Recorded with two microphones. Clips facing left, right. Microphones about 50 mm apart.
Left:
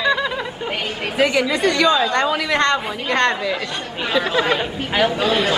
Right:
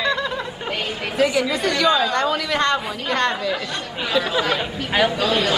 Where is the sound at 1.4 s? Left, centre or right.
Centre.